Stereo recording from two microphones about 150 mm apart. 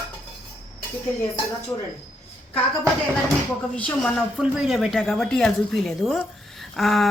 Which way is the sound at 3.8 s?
10° left (ahead or behind).